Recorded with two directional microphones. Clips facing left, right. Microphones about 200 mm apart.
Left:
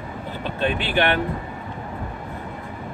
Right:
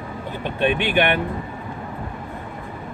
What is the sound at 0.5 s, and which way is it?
Speech, 15° right (ahead or behind).